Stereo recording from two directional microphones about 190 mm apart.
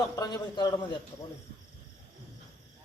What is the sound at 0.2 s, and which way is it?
Speech, 20° left (ahead or behind).